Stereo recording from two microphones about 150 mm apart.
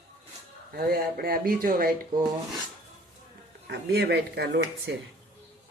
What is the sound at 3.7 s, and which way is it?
Speech, 90° right.